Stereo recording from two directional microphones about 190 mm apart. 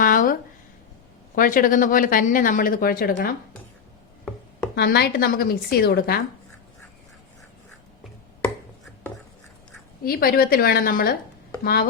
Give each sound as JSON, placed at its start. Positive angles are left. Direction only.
{"t": 0.0, "sound": "a sound", "side_deg": 45}
{"t": 1.4, "sound": "speech", "side_deg": 45}
{"t": 4.7, "sound": "speech", "side_deg": 55}
{"t": 10.0, "sound": "speech", "side_deg": 50}